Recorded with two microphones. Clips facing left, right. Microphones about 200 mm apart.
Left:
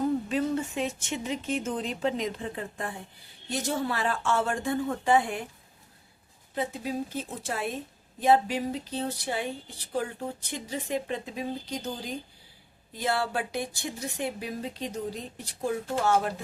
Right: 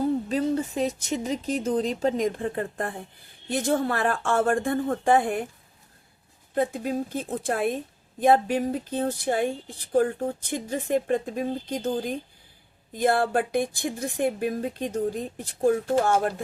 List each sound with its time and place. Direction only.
0.0 s speech: 35° right (ahead or behind)
6.5 s speech: 50° right (ahead or behind)